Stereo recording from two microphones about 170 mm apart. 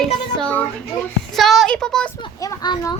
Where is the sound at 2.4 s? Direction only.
20° left (ahead or behind).